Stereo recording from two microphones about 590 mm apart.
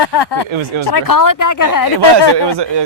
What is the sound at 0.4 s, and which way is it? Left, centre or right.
Speech, right.